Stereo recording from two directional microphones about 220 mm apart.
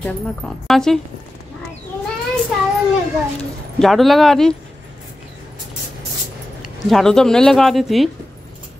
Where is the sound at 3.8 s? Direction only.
Centre (ahead or behind).